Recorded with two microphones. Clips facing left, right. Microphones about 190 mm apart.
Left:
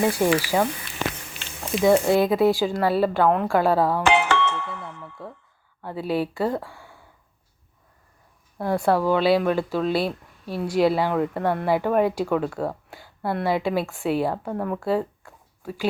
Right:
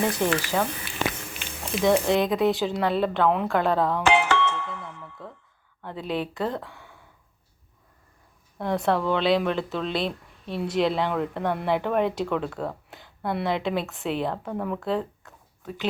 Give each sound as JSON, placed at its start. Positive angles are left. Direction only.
{"t": 0.0, "sound": "speech", "side_deg": 10}
{"t": 1.7, "sound": "speech", "side_deg": 5}
{"t": 4.0, "sound": "music", "side_deg": 70}
{"t": 5.2, "sound": "a sound", "side_deg": 5}
{"t": 5.8, "sound": "speech", "side_deg": 5}
{"t": 8.5, "sound": "speech", "side_deg": 5}